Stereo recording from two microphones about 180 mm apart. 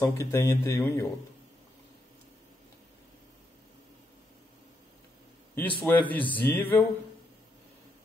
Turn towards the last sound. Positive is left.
turn(degrees=10)  # may be behind; listen again after turning